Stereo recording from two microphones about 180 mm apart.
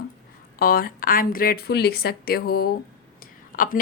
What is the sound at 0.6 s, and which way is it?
Speech, 55° left (ahead or behind).